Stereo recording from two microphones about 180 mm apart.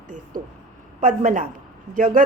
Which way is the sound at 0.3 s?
50° right (ahead or behind).